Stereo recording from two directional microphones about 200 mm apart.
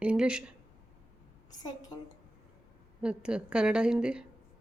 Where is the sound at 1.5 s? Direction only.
20° left (ahead or behind).